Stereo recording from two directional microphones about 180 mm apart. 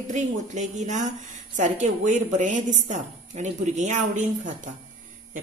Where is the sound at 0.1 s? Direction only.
40° right (ahead or behind).